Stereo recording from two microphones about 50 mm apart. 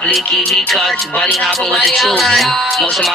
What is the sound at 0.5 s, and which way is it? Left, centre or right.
Speech, centre.